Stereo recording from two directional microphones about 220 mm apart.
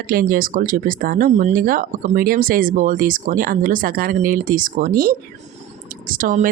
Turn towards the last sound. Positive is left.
turn(degrees=-35)  # may be behind; listen again after turning